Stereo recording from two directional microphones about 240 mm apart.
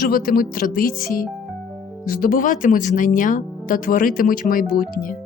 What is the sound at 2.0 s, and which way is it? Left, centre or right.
Speech, left.